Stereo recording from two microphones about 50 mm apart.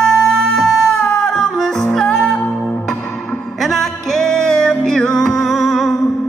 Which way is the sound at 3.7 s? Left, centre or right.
Centre.